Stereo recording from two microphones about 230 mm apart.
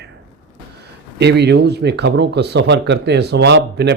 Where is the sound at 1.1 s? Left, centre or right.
Right.